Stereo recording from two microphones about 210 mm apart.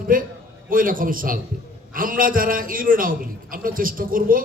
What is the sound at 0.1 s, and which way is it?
A man's voice, 40° right (ahead or behind).